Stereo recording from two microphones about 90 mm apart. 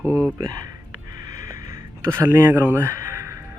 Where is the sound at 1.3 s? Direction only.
35° right (ahead or behind).